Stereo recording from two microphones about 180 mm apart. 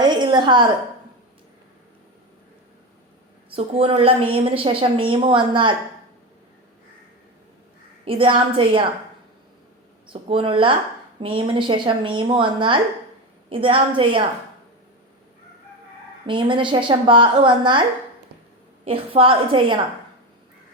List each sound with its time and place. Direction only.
0.0 s a sound: 25° right (ahead or behind)
3.5 s a woman's voice: 30° right (ahead or behind)
8.0 s a woman's voice: 30° right (ahead or behind)
10.1 s a woman's voice: 30° right (ahead or behind)
16.2 s a woman's voice: 25° right (ahead or behind)
18.9 s a woman's voice: 30° right (ahead or behind)